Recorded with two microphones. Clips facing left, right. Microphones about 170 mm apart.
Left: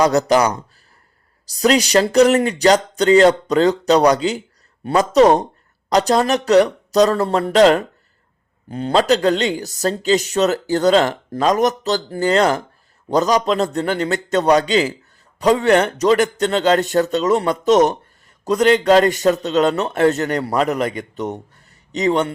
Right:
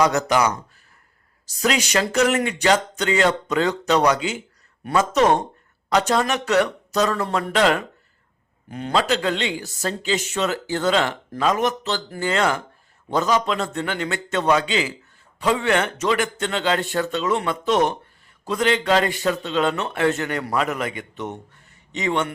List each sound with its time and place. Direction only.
0.0 s a man's voice: 35° left (ahead or behind)